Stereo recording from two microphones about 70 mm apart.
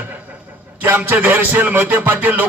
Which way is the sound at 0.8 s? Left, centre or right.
Right.